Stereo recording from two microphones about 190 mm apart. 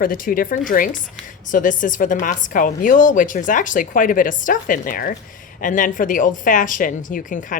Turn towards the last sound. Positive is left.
turn(degrees=45)  # may be behind; listen again after turning